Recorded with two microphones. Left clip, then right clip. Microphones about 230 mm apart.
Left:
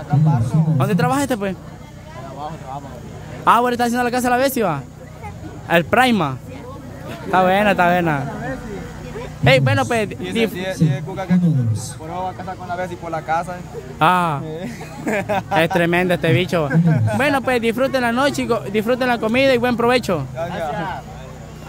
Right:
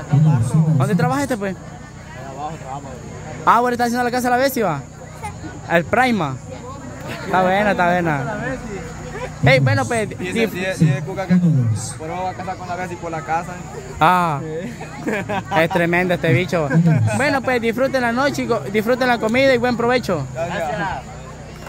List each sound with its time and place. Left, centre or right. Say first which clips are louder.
0.3 s speech: even; centre
3.4 s speech: even; centre
9.4 s speech: left 1 dB; centre
10.5 s a man's voice: right 2 dB; centre
14.6 s speech: even; left
15.5 s speech: right 1 dB; centre
16.8 s speech: even; centre
17.2 s speech: left 1 dB; centre
20.7 s speech: right 2 dB; centre